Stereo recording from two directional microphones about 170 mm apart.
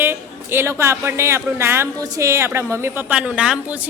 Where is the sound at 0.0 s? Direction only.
15° right (ahead or behind).